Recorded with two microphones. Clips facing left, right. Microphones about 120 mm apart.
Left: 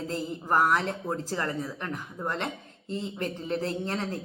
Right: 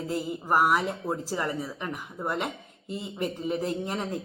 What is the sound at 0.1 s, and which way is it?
Speech, 10° right (ahead or behind).